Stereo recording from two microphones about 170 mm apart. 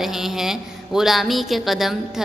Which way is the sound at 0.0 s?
Centre (ahead or behind).